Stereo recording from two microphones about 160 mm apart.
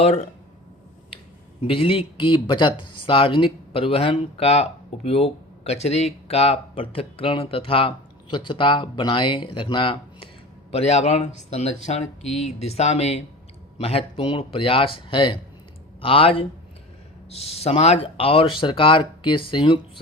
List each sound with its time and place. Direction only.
1.6 s speech: 35° left (ahead or behind)